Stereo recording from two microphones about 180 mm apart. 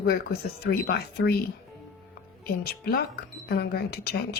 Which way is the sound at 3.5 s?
60° left (ahead or behind).